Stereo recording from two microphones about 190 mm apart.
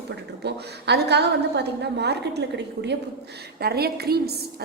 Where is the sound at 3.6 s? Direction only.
55° right (ahead or behind).